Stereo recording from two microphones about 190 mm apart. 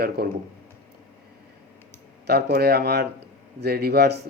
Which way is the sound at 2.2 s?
55° right (ahead or behind).